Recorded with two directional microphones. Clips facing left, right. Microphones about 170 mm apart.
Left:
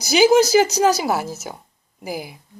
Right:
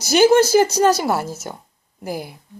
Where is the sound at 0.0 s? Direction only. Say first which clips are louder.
Right 1 dB; centre (ahead or behind).